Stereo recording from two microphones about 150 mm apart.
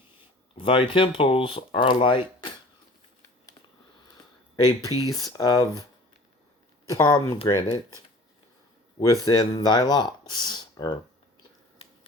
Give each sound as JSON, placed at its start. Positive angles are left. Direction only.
{"t": 0.5, "sound": "speech", "side_deg": 35}
{"t": 4.6, "sound": "speech", "side_deg": 25}
{"t": 6.8, "sound": "speech", "side_deg": 25}
{"t": 9.2, "sound": "speech", "side_deg": 25}